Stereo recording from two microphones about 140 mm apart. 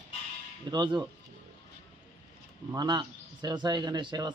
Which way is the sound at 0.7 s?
35° right (ahead or behind).